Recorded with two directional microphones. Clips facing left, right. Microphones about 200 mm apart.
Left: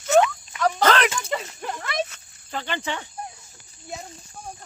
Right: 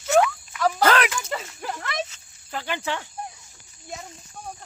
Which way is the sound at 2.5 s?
5° right (ahead or behind).